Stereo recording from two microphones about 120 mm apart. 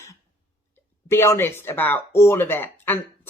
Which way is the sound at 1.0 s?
20° left (ahead or behind).